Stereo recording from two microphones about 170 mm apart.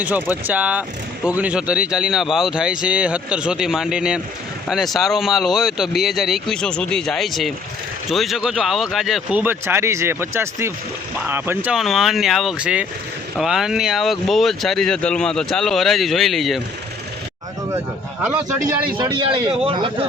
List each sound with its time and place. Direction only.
0.0 s speech: 10° right (ahead or behind)
17.7 s speech: 10° right (ahead or behind)
18.9 s speech: 25° right (ahead or behind)